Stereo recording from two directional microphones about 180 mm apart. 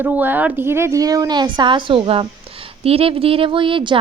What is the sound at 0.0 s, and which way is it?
A woman's voice, 10° right (ahead or behind).